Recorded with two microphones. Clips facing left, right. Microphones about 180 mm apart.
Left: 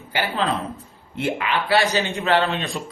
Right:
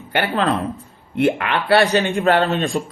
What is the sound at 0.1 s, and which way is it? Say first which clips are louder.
A man's voice: right 4 dB; 60° right (ahead or behind).